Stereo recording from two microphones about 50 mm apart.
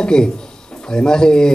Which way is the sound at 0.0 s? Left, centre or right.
Centre.